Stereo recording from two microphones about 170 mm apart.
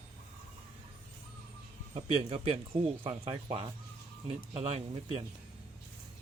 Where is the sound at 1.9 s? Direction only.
35° right (ahead or behind).